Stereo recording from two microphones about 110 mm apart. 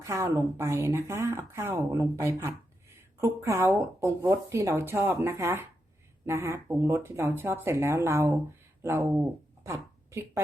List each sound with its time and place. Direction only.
0.0 s a woman's voice: 25° right (ahead or behind)